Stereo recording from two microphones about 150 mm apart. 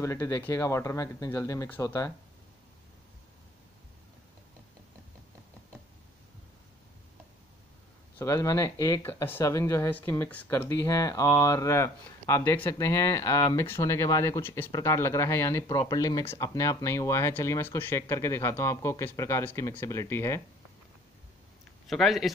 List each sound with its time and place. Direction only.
0.0 s speech: 20° left (ahead or behind)
8.2 s speech: 20° left (ahead or behind)
10.9 s speech: 25° left (ahead or behind)
21.8 s speech: centre (ahead or behind)